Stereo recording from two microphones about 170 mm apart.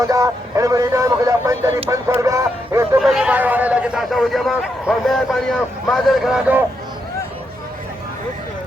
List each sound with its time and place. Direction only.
0.0 s speech: 20° right (ahead or behind)
3.0 s a man's voice: centre (ahead or behind)